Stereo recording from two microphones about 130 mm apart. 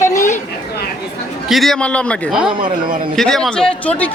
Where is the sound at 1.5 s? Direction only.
Centre (ahead or behind).